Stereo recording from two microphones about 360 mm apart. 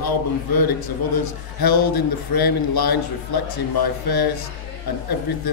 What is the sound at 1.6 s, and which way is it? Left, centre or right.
A man's voice, left.